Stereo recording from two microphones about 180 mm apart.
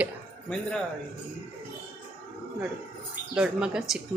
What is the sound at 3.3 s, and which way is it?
Speech, 5° right (ahead or behind).